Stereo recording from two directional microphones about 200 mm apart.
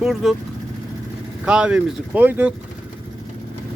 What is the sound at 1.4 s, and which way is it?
Speech, 5° right (ahead or behind).